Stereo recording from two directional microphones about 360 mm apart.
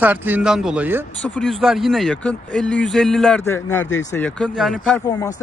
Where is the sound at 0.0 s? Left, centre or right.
Centre.